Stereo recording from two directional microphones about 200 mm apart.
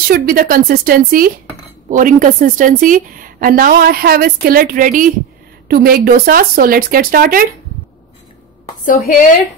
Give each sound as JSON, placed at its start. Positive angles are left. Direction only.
{"t": 0.1, "sound": "a woman's voice", "side_deg": -45}
{"t": 8.8, "sound": "a woman's voice", "side_deg": 40}